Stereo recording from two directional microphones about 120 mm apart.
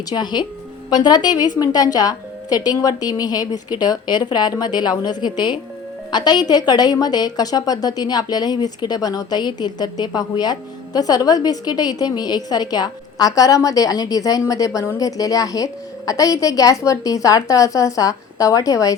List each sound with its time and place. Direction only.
0.1 s a woman's voice: 35° left (ahead or behind)